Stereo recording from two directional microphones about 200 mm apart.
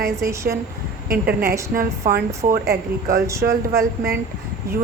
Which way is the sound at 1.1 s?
50° right (ahead or behind).